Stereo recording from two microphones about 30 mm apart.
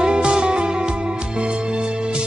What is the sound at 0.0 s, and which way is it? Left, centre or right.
Music, right.